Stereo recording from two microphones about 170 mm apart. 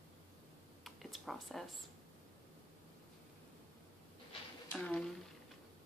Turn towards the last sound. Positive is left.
turn(degrees=5)  # may be behind; listen again after turning